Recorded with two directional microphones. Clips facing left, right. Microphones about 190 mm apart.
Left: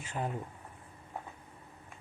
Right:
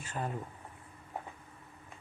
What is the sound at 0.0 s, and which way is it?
Speech, 15° left (ahead or behind).